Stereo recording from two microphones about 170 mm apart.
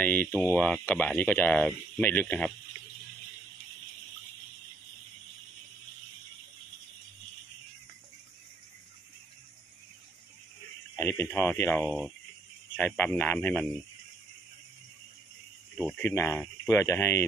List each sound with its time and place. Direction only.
0.0 s speech: 10° left (ahead or behind)
11.0 s a sound: 15° left (ahead or behind)
11.3 s speech: 15° left (ahead or behind)
11.8 s speech: centre (ahead or behind)
15.9 s speech: 10° left (ahead or behind)